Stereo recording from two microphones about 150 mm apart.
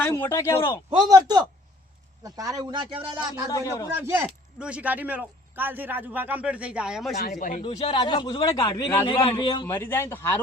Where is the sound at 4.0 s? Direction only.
15° right (ahead or behind).